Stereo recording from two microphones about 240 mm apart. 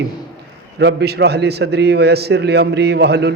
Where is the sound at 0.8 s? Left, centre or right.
Right.